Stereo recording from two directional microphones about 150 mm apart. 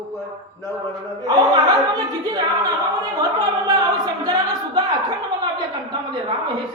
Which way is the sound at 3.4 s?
25° right (ahead or behind).